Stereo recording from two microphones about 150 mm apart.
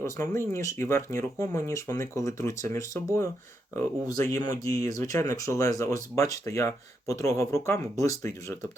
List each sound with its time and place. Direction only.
0.0 s speech: 20° left (ahead or behind)